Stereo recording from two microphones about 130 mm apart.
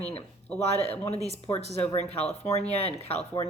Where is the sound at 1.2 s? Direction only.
55° left (ahead or behind).